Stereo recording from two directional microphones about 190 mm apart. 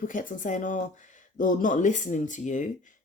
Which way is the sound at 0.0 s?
45° left (ahead or behind).